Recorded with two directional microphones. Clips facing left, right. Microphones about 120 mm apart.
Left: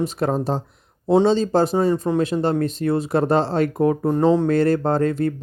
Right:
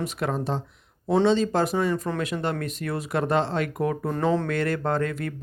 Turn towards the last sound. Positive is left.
turn(degrees=30)  # may be behind; listen again after turning